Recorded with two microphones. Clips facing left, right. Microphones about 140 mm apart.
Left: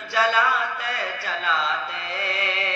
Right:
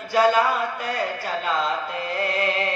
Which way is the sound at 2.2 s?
45° right (ahead or behind).